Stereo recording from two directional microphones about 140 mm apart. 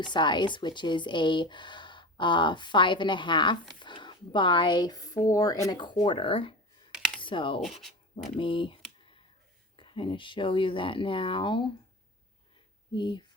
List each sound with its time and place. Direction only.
0.0 s speech: 35° left (ahead or behind)
12.9 s speech: 35° left (ahead or behind)